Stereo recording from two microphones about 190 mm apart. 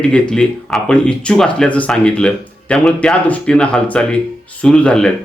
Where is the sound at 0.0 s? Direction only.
5° left (ahead or behind).